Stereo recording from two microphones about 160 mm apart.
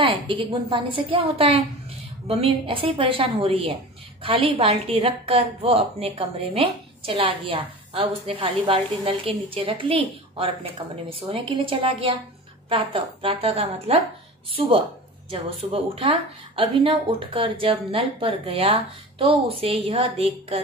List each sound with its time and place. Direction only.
0.0 s a woman's voice: 35° right (ahead or behind)
15.7 s a woman's voice: 35° right (ahead or behind)